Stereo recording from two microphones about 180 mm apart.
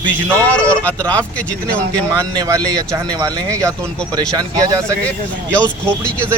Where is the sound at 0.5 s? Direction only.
10° left (ahead or behind).